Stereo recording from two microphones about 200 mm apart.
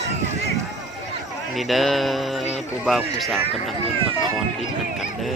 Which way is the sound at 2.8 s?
Centre (ahead or behind).